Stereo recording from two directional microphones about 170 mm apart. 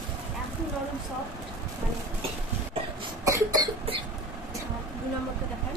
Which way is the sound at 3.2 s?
20° right (ahead or behind).